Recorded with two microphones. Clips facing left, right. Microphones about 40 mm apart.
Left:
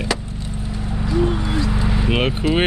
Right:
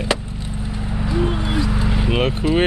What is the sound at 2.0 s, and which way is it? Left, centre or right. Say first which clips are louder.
Speech: even; centre.